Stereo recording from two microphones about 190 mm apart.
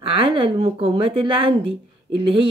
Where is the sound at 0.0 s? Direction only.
30° right (ahead or behind).